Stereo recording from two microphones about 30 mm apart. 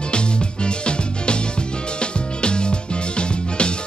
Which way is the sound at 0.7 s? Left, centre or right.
Left.